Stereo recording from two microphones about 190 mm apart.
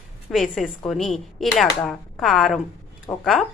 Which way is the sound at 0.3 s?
Centre (ahead or behind).